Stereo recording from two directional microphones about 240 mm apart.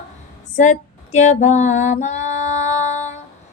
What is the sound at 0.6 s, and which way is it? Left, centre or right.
Female singing, left.